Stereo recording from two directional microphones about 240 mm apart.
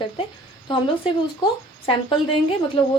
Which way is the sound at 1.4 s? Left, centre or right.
Left.